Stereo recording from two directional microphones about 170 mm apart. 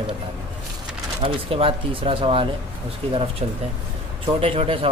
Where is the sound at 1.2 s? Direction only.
30° right (ahead or behind).